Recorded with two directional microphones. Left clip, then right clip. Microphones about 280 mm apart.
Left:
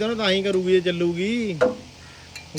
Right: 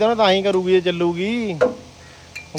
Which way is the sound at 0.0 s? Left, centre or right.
Centre.